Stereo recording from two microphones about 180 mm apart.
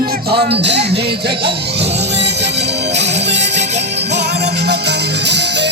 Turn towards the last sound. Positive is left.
turn(degrees=-75)  # may be behind; listen again after turning